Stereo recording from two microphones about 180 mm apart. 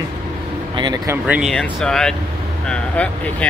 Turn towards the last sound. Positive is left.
turn(degrees=5)  # may be behind; listen again after turning